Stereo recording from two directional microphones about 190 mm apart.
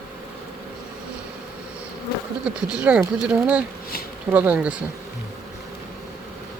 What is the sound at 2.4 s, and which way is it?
Speech, 5° right (ahead or behind).